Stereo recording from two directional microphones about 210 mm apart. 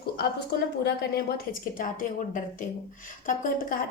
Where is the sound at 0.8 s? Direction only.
50° left (ahead or behind).